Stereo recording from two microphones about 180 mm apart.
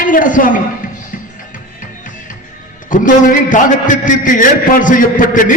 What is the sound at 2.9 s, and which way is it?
A man's voice, 50° left (ahead or behind).